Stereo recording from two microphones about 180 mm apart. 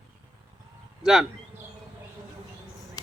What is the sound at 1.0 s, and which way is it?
Speech, 5° right (ahead or behind).